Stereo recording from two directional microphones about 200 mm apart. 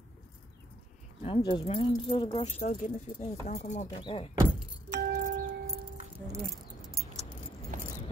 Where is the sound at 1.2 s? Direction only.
25° left (ahead or behind).